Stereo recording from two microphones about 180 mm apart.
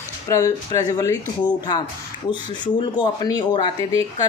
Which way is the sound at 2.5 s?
25° left (ahead or behind).